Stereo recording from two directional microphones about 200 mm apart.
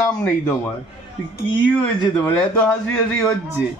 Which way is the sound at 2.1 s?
10° left (ahead or behind).